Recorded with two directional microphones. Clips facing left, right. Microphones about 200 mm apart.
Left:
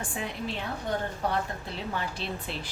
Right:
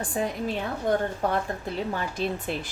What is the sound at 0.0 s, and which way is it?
A woman's voice, 40° right (ahead or behind).